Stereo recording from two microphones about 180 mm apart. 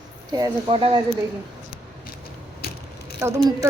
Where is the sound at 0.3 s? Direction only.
25° right (ahead or behind).